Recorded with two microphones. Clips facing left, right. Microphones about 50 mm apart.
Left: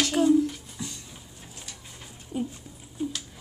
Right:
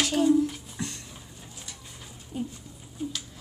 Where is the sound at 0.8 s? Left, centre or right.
Right.